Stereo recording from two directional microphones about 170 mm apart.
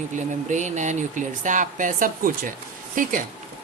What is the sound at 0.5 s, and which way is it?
A woman's voice, 45° right (ahead or behind).